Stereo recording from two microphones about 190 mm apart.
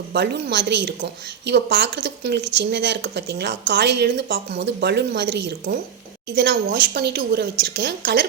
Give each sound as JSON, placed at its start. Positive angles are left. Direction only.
{"t": 0.1, "sound": "a woman's voice", "side_deg": -60}